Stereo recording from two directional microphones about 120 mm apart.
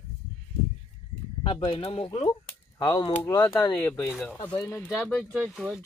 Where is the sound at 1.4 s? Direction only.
50° left (ahead or behind).